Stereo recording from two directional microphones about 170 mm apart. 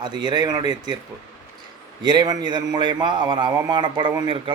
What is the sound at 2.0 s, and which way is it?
A man's voice, 25° right (ahead or behind).